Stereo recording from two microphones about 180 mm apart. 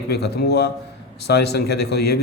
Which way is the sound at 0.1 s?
65° left (ahead or behind).